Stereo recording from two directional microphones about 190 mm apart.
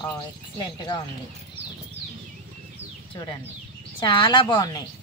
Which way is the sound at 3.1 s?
25° left (ahead or behind).